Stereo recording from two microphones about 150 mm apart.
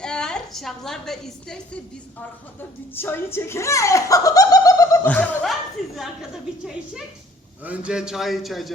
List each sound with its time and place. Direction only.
0.0 s a woman's voice: 5° left (ahead or behind)
2.6 s speech: 15° left (ahead or behind)
5.0 s a woman's voice: 10° left (ahead or behind)
7.6 s a man's voice: 10° right (ahead or behind)